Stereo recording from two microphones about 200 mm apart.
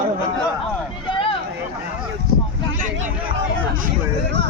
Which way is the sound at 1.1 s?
25° left (ahead or behind).